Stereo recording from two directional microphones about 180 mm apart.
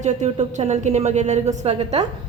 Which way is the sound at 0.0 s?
40° right (ahead or behind).